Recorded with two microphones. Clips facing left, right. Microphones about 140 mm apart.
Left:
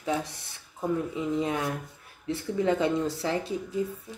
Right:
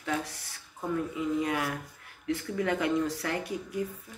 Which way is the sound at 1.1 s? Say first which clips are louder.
Left 1 dB; 25° left (ahead or behind).